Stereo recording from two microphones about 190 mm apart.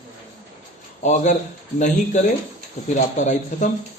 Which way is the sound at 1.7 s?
40° left (ahead or behind).